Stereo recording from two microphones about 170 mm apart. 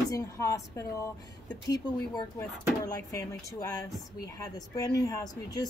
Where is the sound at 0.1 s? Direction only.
20° left (ahead or behind).